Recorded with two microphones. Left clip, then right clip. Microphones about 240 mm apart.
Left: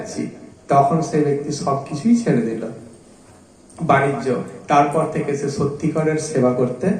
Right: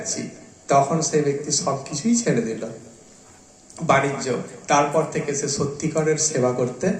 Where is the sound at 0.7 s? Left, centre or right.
Right.